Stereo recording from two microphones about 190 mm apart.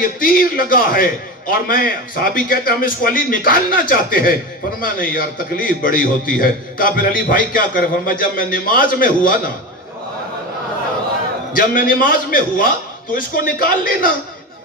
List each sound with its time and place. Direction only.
0.0 s a man's voice: 50° left (ahead or behind)
11.5 s a man's voice: 50° left (ahead or behind)